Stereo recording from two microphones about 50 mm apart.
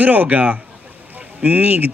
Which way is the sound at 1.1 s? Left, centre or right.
Right.